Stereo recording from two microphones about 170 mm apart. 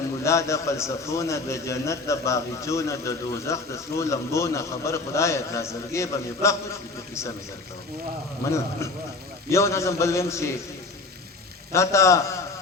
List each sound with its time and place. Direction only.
0.3 s a man's voice: 15° left (ahead or behind)
8.4 s a man's voice: 15° left (ahead or behind)
11.7 s a man's voice: 15° left (ahead or behind)